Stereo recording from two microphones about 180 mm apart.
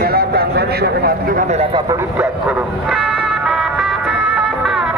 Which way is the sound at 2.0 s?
10° right (ahead or behind).